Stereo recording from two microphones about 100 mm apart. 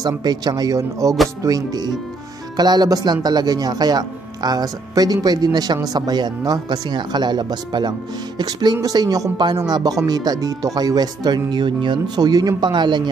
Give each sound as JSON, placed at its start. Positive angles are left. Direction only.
{"t": 0.0, "sound": "speech", "side_deg": -45}